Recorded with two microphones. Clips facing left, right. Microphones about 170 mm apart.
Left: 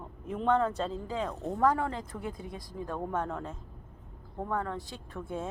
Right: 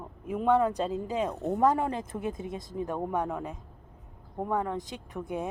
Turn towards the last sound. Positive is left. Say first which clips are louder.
# right 3 dB
turn(degrees=-15)  # may be behind; listen again after turning